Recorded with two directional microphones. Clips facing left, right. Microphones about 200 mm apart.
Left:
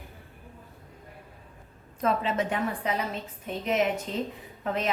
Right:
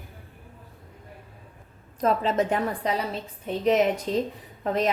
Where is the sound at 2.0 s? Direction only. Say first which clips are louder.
Right 4 dB; 40° right (ahead or behind).